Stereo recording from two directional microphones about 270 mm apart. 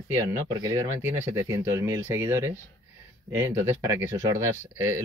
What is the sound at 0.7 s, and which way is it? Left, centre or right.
Speech, centre.